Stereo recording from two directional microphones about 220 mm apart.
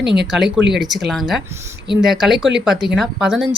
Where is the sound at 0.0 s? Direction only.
50° right (ahead or behind).